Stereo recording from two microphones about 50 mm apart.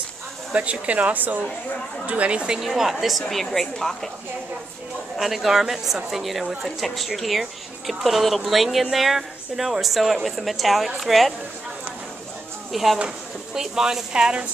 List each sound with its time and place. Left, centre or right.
0.5 s speech: right
2.0 s speech: right
2.6 s a woman's voice: centre
5.1 s a woman's voice: centre
12.7 s a woman's voice: centre